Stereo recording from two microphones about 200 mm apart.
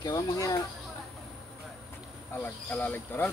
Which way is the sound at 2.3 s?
10° left (ahead or behind).